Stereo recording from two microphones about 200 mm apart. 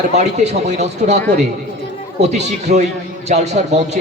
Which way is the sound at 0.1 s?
35° right (ahead or behind).